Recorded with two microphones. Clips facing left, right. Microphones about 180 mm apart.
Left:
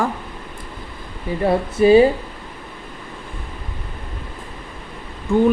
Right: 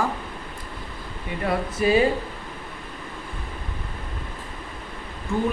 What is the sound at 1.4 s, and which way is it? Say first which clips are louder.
Speech: left 7 dB; 30° left (ahead or behind).